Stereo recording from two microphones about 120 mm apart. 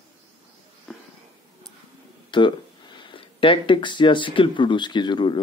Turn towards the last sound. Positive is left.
turn(degrees=40)  # may be behind; listen again after turning